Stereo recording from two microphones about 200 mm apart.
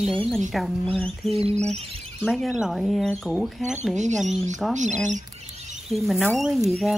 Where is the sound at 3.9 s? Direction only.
35° right (ahead or behind).